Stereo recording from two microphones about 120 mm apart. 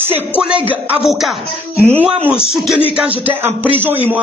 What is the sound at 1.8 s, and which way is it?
Speech, 15° right (ahead or behind).